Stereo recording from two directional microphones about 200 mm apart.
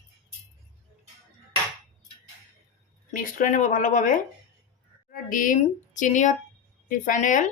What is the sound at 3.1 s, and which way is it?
A woman's voice, 40° left (ahead or behind).